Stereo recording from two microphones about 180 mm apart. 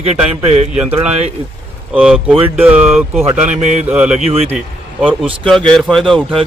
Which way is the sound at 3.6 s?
40° right (ahead or behind).